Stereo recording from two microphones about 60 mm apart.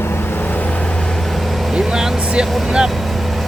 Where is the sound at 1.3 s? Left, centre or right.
Centre.